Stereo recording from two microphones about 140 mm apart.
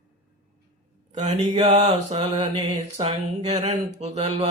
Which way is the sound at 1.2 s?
55° right (ahead or behind).